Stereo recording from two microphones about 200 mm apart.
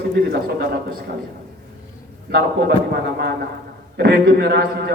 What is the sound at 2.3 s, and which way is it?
A man's voice, 55° right (ahead or behind).